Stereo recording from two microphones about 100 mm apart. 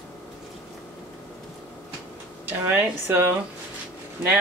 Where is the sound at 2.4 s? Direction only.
20° right (ahead or behind).